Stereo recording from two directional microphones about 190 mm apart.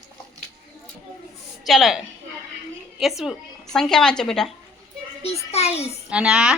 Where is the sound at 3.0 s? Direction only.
Centre (ahead or behind).